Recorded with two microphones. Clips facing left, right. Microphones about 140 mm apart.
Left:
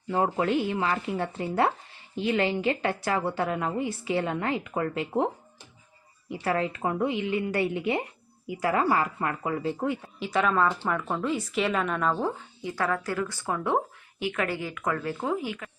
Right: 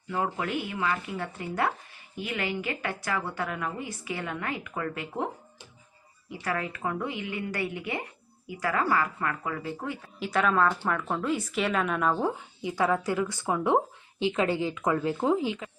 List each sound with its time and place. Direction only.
0.1 s a woman's voice: 30° left (ahead or behind)
10.2 s a woman's voice: centre (ahead or behind); by 15.7 s 20° right (ahead or behind)